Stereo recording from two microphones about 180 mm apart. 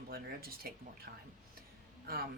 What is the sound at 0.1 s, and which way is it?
Speech, 55° right (ahead or behind).